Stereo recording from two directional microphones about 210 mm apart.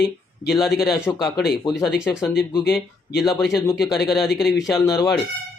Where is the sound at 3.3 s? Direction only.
Centre (ahead or behind).